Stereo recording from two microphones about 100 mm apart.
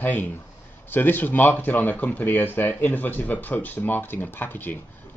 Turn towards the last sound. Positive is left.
turn(degrees=20)  # may be behind; listen again after turning